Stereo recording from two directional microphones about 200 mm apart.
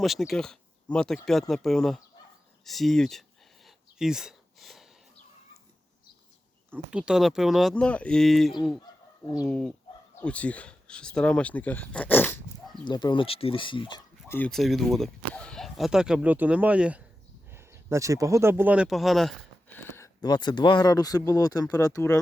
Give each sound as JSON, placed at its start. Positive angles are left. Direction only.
{"t": 0.0, "sound": "speech", "side_deg": 0}
{"t": 3.9, "sound": "a sound", "side_deg": 0}
{"t": 6.7, "sound": "speech", "side_deg": -5}
{"t": 12.9, "sound": "speech", "side_deg": 20}
{"t": 14.3, "sound": "speech", "side_deg": 10}
{"t": 20.0, "sound": "speech", "side_deg": 20}